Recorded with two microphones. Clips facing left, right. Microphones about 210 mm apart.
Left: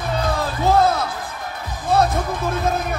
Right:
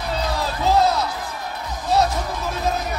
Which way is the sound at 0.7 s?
50° left (ahead or behind).